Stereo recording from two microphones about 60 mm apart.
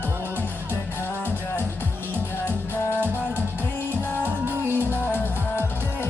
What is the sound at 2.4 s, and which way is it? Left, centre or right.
Music, left.